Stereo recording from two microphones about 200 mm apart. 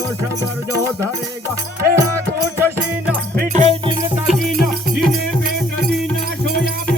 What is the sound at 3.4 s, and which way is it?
Music, 40° right (ahead or behind).